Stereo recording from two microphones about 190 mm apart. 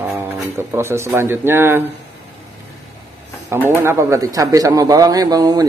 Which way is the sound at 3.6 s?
15° right (ahead or behind).